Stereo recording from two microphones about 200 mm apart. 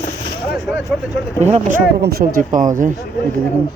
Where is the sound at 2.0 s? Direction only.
50° right (ahead or behind).